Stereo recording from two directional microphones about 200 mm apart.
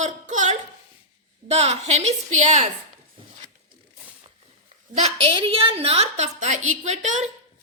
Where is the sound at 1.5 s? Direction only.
30° right (ahead or behind).